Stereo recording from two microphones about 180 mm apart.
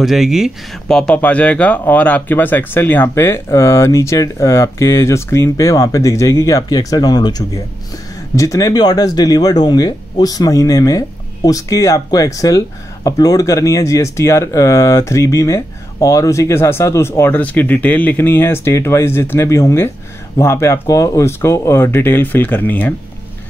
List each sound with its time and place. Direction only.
0.0 s speech: centre (ahead or behind)